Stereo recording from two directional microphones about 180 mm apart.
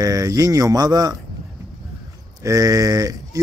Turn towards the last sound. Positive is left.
turn(degrees=-20)  # may be behind; listen again after turning